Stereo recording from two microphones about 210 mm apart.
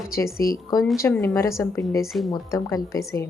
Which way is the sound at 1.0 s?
10° left (ahead or behind).